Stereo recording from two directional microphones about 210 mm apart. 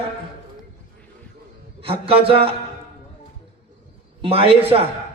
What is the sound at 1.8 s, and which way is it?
Speech, 25° right (ahead or behind).